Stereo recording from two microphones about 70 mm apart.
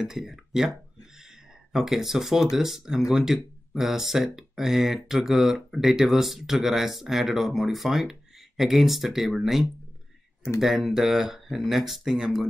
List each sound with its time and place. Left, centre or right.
0.0 s speech: centre